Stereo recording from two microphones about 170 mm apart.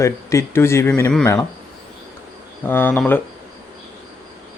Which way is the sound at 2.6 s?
10° left (ahead or behind).